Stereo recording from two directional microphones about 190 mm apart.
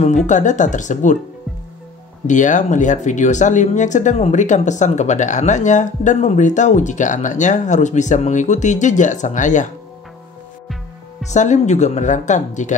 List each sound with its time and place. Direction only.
0.3 s speech: 40° left (ahead or behind)
2.2 s speech: 40° left (ahead or behind)
11.2 s speech: 40° left (ahead or behind)